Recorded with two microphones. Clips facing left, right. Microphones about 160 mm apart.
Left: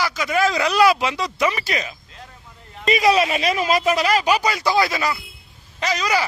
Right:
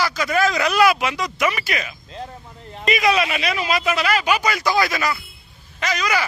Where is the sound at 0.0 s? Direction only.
15° left (ahead or behind).